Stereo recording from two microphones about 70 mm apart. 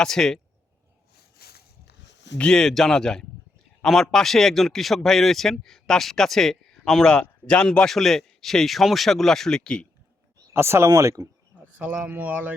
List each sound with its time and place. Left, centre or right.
0.0 s a man's voice: centre
2.4 s a man's voice: centre
10.5 s speech: right
11.8 s speech: right